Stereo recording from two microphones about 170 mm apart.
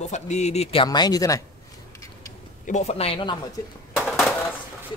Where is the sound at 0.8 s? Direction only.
25° left (ahead or behind).